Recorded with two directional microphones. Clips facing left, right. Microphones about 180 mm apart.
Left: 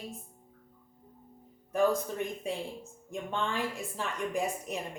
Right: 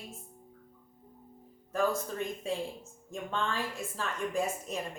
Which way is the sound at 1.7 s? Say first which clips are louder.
Left 3 dB; 15° left (ahead or behind).